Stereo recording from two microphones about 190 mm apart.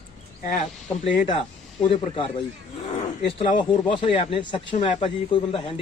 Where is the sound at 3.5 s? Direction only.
25° left (ahead or behind).